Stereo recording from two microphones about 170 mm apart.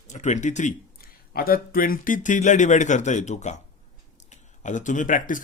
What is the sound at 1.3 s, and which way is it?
A man's voice, 60° left (ahead or behind).